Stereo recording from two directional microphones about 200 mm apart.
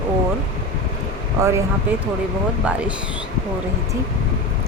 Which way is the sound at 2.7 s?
5° right (ahead or behind).